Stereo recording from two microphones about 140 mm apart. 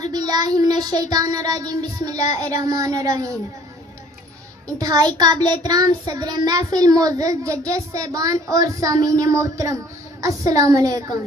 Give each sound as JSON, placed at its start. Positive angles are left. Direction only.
{"t": 0.0, "sound": "child singing", "side_deg": -30}
{"t": 4.8, "sound": "child singing", "side_deg": -25}